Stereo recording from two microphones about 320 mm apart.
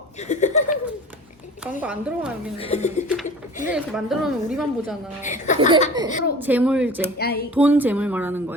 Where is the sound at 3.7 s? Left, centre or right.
Centre.